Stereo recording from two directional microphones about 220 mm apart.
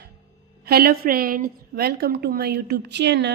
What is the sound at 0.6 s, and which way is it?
A woman's voice, 45° right (ahead or behind).